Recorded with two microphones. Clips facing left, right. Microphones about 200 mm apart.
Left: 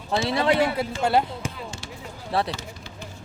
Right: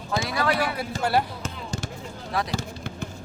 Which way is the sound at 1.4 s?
10° left (ahead or behind).